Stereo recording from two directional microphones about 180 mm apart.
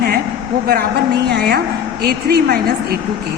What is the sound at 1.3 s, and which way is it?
A woman's voice, 60° right (ahead or behind).